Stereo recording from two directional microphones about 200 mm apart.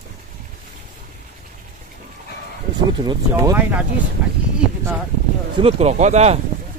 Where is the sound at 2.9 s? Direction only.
20° right (ahead or behind).